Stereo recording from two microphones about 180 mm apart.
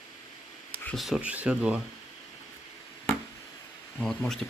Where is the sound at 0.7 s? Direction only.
5° left (ahead or behind).